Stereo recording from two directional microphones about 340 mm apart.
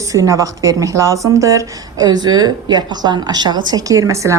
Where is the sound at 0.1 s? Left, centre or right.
Centre.